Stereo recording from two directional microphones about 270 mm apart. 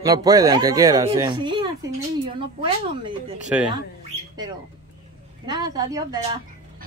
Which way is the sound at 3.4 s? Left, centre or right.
Centre.